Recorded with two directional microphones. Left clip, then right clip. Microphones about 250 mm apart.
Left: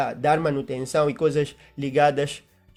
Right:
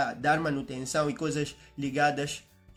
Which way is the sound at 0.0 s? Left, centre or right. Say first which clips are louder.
Left 5 dB; left.